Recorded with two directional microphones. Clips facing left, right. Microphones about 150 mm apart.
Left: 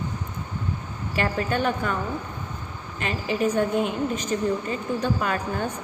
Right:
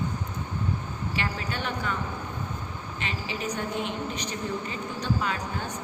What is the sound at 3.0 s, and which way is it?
A woman's voice, 50° left (ahead or behind).